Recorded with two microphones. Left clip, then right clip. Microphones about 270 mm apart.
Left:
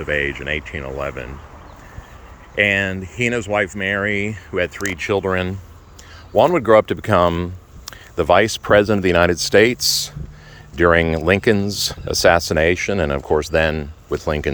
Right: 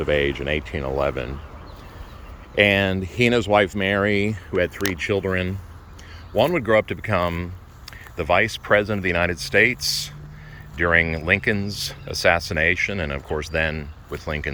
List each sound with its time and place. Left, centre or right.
0.0 s speech: centre
2.6 s speech: centre; by 14.5 s left